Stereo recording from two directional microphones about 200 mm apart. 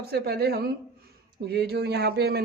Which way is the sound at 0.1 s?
55° right (ahead or behind).